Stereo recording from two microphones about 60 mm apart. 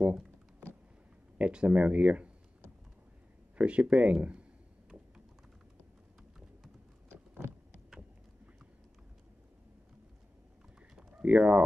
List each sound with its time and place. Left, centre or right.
1.4 s speech: centre
3.5 s speech: centre
4.8 s a sound: centre
11.0 s bird: centre
11.2 s speech: right